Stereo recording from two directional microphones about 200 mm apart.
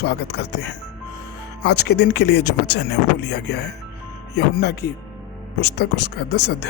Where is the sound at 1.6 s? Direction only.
55° left (ahead or behind).